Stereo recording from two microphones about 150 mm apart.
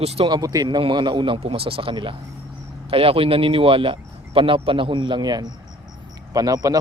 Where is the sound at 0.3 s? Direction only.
25° right (ahead or behind).